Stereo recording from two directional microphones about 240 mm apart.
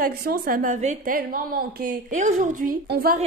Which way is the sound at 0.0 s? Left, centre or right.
Right.